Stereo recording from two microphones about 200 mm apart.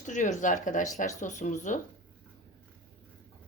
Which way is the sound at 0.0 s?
40° left (ahead or behind).